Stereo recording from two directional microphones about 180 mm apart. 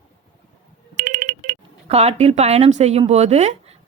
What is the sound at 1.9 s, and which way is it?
Speech, 35° right (ahead or behind).